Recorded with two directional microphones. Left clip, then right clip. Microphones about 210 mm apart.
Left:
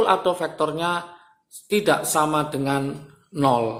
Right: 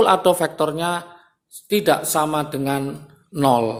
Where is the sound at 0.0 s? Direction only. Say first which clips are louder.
Right 4 dB; 30° right (ahead or behind).